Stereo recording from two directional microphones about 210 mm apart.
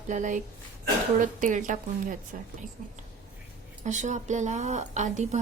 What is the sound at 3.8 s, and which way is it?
Speech, 35° right (ahead or behind).